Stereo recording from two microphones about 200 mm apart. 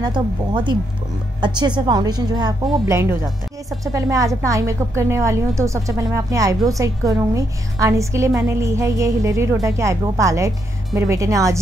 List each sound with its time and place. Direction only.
0.0 s a woman's voice: 25° right (ahead or behind)